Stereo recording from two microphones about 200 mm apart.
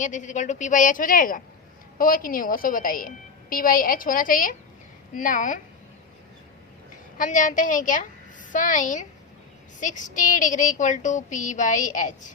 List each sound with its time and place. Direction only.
0.0 s a woman's voice: 40° left (ahead or behind)
7.2 s a woman's voice: 40° left (ahead or behind)